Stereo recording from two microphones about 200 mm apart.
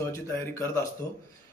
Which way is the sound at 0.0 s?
15° left (ahead or behind).